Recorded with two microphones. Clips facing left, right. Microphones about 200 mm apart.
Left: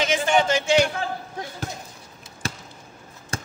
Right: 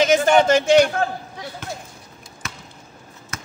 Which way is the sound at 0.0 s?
40° right (ahead or behind).